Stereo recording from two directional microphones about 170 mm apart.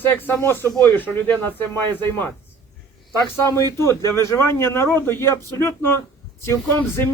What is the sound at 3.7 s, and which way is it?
A man's voice, 15° left (ahead or behind).